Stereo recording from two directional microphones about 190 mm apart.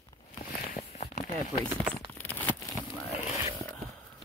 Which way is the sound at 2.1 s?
10° left (ahead or behind).